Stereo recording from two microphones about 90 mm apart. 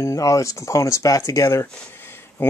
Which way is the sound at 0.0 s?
35° left (ahead or behind).